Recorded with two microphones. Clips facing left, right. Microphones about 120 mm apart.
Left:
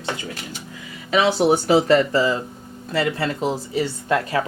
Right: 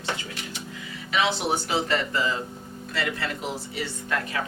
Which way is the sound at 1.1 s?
40° left (ahead or behind).